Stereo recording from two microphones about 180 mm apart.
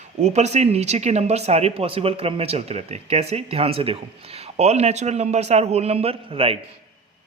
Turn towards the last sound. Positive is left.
turn(degrees=-30)  # may be behind; listen again after turning